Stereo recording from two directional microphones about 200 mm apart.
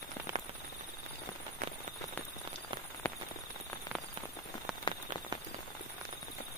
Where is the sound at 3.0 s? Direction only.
10° left (ahead or behind).